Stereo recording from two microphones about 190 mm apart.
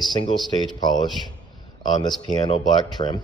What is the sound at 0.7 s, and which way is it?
A man's voice, 20° left (ahead or behind).